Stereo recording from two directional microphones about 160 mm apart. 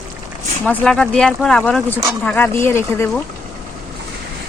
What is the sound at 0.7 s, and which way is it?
Speech, 5° left (ahead or behind).